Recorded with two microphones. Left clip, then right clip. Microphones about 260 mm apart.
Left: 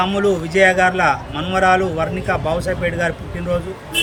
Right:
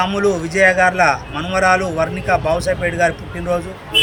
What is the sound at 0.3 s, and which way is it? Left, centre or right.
Speech, centre.